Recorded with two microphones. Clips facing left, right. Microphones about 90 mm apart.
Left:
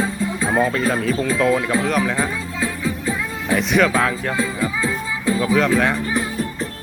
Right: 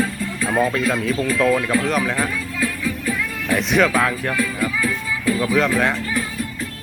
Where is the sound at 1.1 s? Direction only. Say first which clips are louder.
Even; 30° left (ahead or behind).